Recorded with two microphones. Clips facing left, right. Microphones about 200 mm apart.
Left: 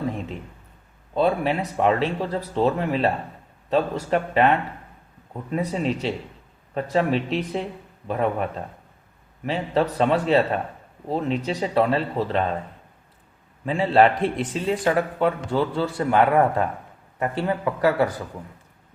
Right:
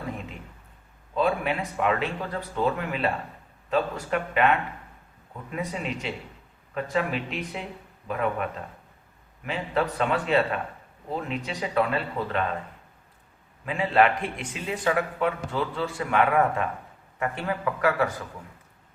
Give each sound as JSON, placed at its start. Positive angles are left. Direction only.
{"t": 1.1, "sound": "speech", "side_deg": 35}
{"t": 4.1, "sound": "speech", "side_deg": 35}
{"t": 13.7, "sound": "speech", "side_deg": 30}